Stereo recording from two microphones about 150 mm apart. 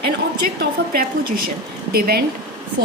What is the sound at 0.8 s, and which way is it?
Speech, 90° right.